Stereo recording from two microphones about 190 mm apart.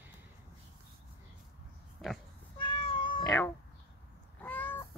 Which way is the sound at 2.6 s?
25° left (ahead or behind).